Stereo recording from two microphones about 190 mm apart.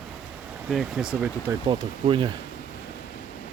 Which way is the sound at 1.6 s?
25° right (ahead or behind).